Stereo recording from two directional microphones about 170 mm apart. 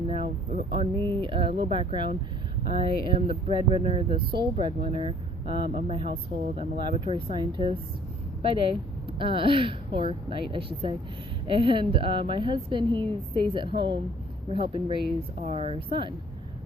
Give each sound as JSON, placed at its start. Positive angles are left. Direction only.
{"t": 0.1, "sound": "a woman's voice", "side_deg": -35}